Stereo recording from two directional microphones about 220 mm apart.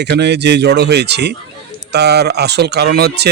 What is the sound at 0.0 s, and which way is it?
Speech, 50° right (ahead or behind).